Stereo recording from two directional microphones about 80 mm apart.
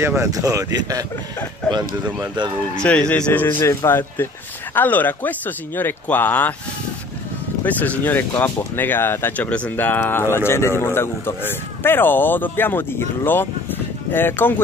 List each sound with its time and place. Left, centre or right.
0.0 s speech: right
0.3 s speech: right
2.8 s speech: centre
3.6 s speech: left
8.0 s speech: left